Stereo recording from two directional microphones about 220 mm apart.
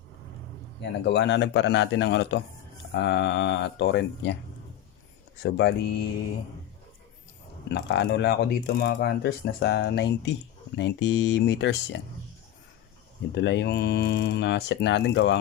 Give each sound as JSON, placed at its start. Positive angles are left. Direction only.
{"t": 0.8, "sound": "speech", "side_deg": 50}
{"t": 5.4, "sound": "speech", "side_deg": 50}
{"t": 7.7, "sound": "speech", "side_deg": 50}
{"t": 13.3, "sound": "speech", "side_deg": 55}